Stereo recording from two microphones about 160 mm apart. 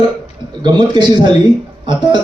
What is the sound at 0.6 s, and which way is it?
A man's voice, 25° right (ahead or behind).